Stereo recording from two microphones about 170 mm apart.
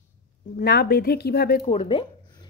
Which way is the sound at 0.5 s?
70° left (ahead or behind).